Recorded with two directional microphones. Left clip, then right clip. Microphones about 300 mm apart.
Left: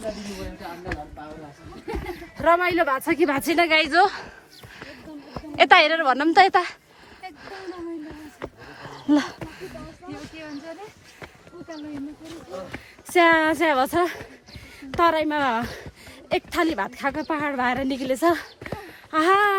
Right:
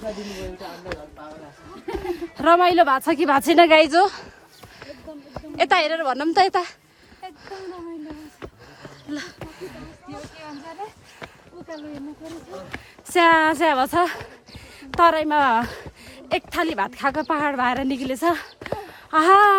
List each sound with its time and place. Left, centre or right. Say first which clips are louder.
0.1 s speech: right 1 dB; right
2.4 s a woman's voice: right 4 dB; centre
3.4 s a woman's voice: right 9 dB; right
3.8 s a woman's voice: right 2 dB; centre
7.3 s a sound: right 1 dB; centre
8.8 s a sound: left 11 dB; centre
12.2 s a woman's voice: right 2 dB; right
12.7 s a woman's voice: even; centre
18.8 s a sound: right 3 dB; centre